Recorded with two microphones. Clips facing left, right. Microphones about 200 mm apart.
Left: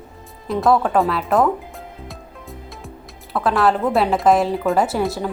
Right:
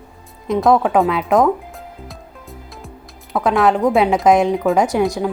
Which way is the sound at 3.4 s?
Centre (ahead or behind).